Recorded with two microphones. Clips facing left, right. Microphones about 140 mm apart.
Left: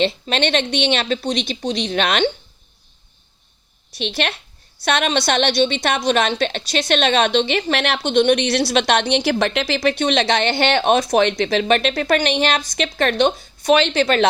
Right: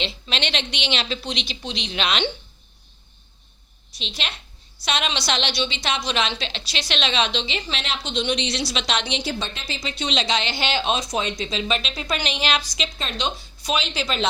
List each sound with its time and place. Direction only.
0.0 s speech: 50° left (ahead or behind)
3.9 s a woman's voice: 65° left (ahead or behind)